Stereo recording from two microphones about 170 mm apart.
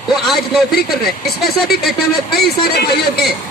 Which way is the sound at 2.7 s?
65° left (ahead or behind).